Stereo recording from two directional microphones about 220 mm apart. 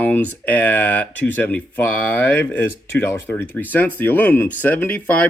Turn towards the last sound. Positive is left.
turn(degrees=10)  # may be behind; listen again after turning